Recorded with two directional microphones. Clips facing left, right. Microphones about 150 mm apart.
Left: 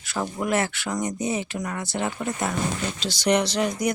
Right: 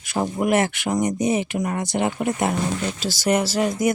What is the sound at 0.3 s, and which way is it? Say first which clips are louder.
Speech: right 5 dB; 15° right (ahead or behind).